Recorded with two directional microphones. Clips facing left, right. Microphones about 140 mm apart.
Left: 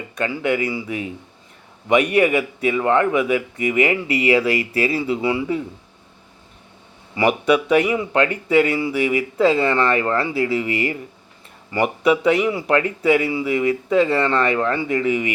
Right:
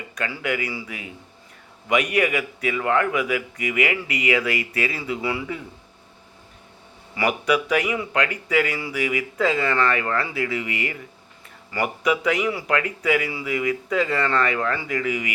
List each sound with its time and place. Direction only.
0.2 s speech: 25° left (ahead or behind)
1.9 s speech: 30° left (ahead or behind)
7.2 s speech: 25° left (ahead or behind)